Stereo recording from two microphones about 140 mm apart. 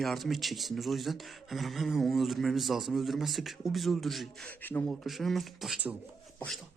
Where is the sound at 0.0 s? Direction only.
Centre (ahead or behind).